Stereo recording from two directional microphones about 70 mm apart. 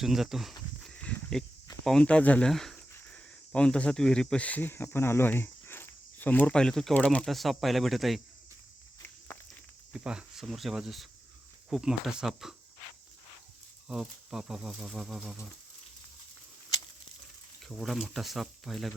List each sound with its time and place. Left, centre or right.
0.0 s speech: centre
1.4 s speech: centre
2.5 s speech: centre
7.3 s speech: centre
10.0 s speech: centre
13.8 s speech: centre
17.7 s speech: centre